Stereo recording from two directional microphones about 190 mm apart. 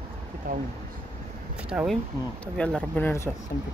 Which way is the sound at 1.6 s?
5° right (ahead or behind).